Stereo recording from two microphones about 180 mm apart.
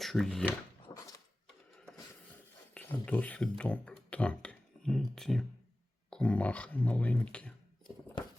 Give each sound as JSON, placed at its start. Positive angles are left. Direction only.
{"t": 0.0, "sound": "speech", "side_deg": 0}
{"t": 0.9, "sound": "a sound", "side_deg": 25}
{"t": 2.7, "sound": "speech", "side_deg": 10}